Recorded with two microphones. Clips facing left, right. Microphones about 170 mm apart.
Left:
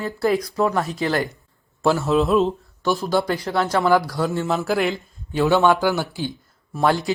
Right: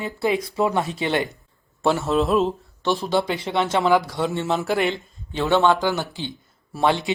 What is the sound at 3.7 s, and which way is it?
Speech, 20° right (ahead or behind).